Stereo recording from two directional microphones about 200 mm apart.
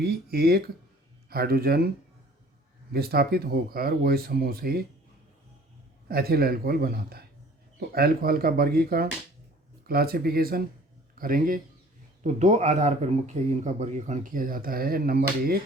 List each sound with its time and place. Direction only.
0.0 s speech: 50° right (ahead or behind)
2.9 s speech: 50° right (ahead or behind)
6.1 s a man's voice: 50° right (ahead or behind)